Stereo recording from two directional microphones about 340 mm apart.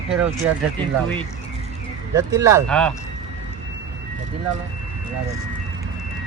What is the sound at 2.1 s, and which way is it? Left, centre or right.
Speech, centre.